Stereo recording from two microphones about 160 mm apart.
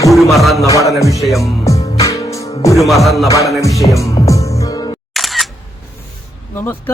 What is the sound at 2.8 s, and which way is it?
Music, centre (ahead or behind).